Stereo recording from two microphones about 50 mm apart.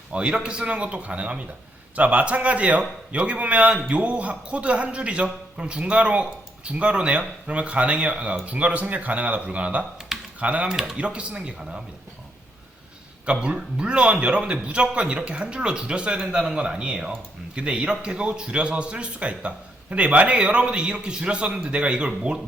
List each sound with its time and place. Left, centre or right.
0.1 s a man's voice: right
10.1 s computer keyboard: centre
10.4 s a man's voice: right
10.7 s a man's voice: centre
10.9 s a man's voice: right
13.2 s a man's voice: centre
16.2 s a man's voice: centre